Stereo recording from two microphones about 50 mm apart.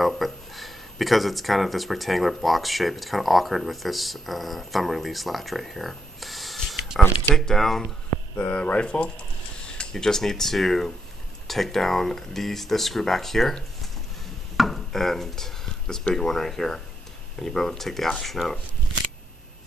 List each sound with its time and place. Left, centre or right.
0.0 s speech: centre
8.4 s speech: left; by 13.6 s centre
14.6 s a sound: centre
16.2 s speech: centre